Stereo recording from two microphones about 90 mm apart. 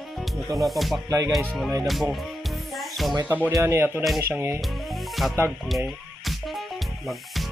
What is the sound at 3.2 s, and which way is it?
Speech, 20° right (ahead or behind).